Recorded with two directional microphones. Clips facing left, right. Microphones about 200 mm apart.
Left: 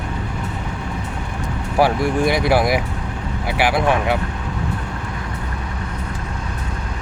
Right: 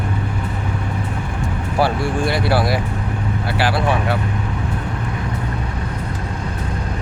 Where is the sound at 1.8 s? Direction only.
15° left (ahead or behind).